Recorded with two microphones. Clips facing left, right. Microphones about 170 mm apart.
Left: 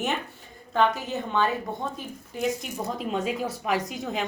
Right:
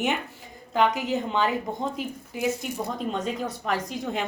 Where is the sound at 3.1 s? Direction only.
5° left (ahead or behind).